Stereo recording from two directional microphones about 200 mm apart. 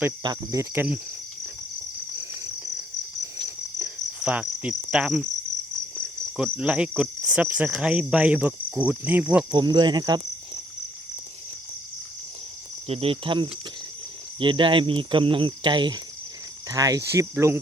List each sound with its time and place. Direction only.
0.2 s speech: 20° right (ahead or behind)
3.8 s cricket: 5° right (ahead or behind)
6.3 s cricket: 5° right (ahead or behind)
9.5 s speech: 20° right (ahead or behind)
12.9 s speech: 30° right (ahead or behind); by 17.6 s 15° right (ahead or behind)